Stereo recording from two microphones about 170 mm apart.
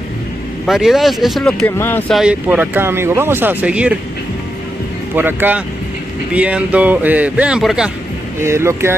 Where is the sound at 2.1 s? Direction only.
5° right (ahead or behind).